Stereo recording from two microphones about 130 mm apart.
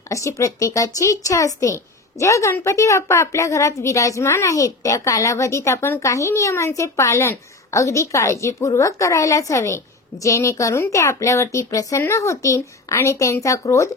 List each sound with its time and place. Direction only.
0.1 s a woman's voice: 25° left (ahead or behind)